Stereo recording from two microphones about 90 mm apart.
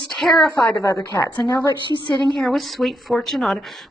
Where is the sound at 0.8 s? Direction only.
35° left (ahead or behind).